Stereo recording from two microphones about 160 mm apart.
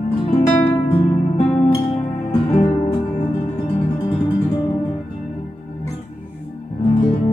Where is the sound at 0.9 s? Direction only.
35° left (ahead or behind).